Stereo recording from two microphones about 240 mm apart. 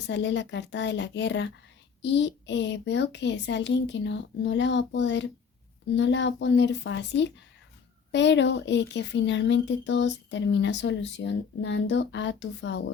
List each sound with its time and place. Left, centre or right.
0.1 s speech: left